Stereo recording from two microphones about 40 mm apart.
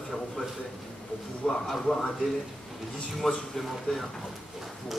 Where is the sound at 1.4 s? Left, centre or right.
Centre.